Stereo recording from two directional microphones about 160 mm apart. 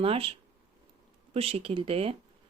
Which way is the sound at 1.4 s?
40° right (ahead or behind).